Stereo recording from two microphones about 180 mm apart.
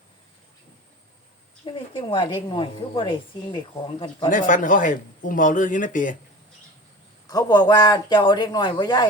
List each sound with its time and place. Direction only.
1.6 s a woman's voice: 30° left (ahead or behind)
4.3 s speech: 45° left (ahead or behind)
7.3 s a woman's voice: 20° left (ahead or behind)